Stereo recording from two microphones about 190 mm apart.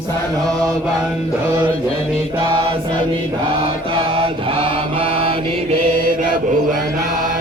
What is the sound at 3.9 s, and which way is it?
Mantra, 30° right (ahead or behind).